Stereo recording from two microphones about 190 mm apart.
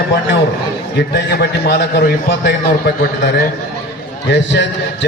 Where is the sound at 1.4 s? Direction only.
60° left (ahead or behind).